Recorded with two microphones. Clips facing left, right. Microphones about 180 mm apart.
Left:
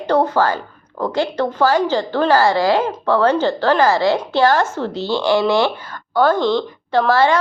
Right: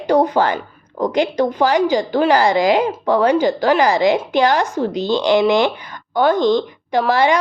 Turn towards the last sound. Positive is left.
turn(degrees=-15)  # may be behind; listen again after turning